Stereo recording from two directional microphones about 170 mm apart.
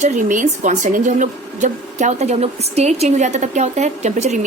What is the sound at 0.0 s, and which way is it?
A woman's voice, 50° right (ahead or behind).